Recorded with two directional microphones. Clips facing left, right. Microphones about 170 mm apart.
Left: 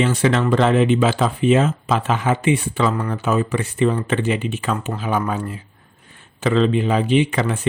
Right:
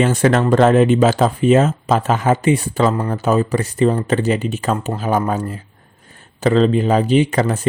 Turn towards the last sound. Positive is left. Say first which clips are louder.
# right 3 dB
turn(degrees=-40)  # may be behind; listen again after turning